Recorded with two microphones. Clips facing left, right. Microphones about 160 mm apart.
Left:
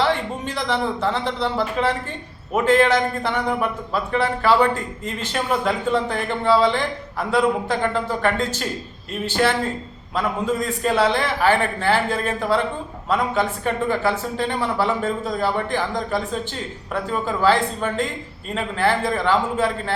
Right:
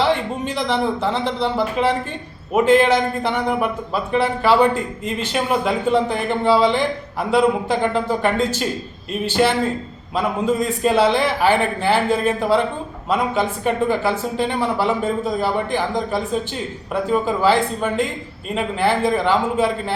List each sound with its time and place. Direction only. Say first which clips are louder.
0.0 s a man's voice: right 2 dB; 20° right (ahead or behind)